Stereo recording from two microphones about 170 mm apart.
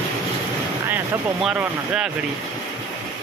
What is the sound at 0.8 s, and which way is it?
Vehicle, 10° right (ahead or behind).